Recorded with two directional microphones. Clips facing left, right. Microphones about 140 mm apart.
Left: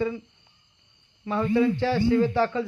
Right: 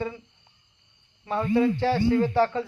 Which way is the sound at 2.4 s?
40° right (ahead or behind).